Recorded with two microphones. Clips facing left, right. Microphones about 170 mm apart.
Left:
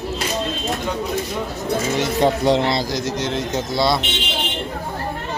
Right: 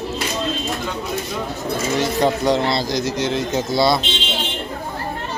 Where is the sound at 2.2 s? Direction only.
25° left (ahead or behind).